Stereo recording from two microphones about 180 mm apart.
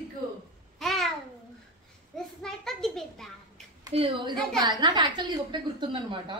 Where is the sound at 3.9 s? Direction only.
30° right (ahead or behind).